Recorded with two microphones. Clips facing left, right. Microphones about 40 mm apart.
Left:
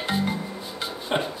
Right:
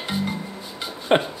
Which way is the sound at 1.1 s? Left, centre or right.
Right.